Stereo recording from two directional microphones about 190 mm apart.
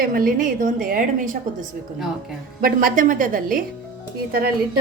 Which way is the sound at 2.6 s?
45° right (ahead or behind).